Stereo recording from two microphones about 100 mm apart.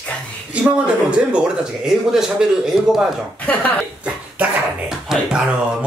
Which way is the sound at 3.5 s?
15° left (ahead or behind).